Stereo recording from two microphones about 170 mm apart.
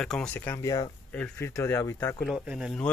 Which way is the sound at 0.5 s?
20° left (ahead or behind).